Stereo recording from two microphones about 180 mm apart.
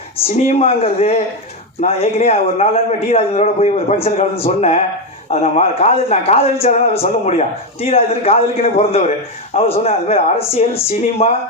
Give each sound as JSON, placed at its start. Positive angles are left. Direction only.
{"t": 0.4, "sound": "a man's voice", "side_deg": 35}